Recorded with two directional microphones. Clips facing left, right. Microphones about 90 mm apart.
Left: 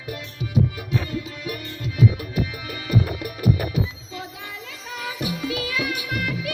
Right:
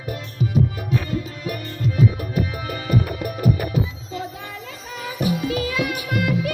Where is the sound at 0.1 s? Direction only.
40° right (ahead or behind).